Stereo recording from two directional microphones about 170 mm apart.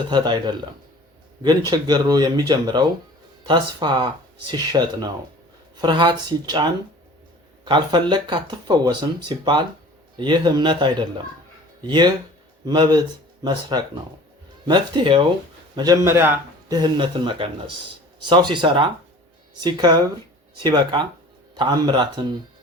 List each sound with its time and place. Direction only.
0.1 s a man's voice: 25° right (ahead or behind)
16.6 s speech: 25° right (ahead or behind)